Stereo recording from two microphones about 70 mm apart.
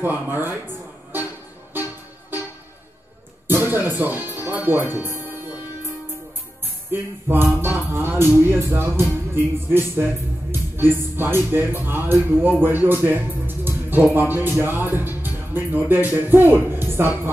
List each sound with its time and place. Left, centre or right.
0.0 s speech: right
3.4 s music: right
4.5 s speech: right
4.9 s music: right
6.6 s music: right
7.6 s speech: right